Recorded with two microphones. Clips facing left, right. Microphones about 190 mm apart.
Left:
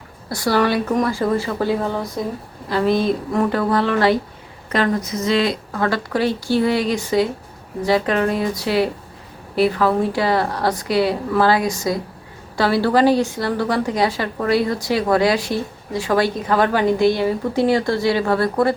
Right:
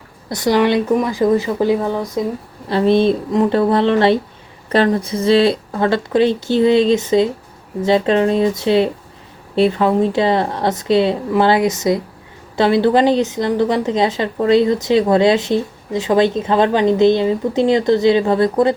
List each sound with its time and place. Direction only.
0.3 s a woman's voice: 20° right (ahead or behind)
2.6 s a woman's voice: 25° right (ahead or behind)